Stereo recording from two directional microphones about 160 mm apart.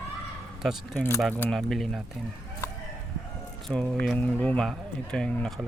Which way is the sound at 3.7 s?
5° left (ahead or behind).